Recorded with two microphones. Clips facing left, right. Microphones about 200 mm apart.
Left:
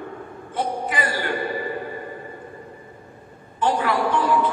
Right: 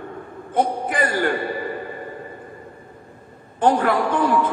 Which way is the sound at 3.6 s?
50° right (ahead or behind).